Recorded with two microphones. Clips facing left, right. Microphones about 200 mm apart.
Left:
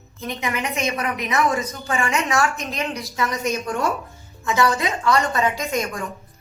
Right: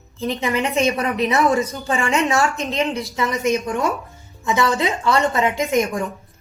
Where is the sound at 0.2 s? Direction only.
30° right (ahead or behind).